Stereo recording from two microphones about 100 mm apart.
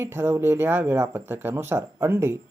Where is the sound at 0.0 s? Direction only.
25° right (ahead or behind).